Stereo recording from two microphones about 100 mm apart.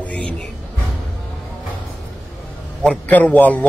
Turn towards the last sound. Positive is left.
turn(degrees=15)  # may be behind; listen again after turning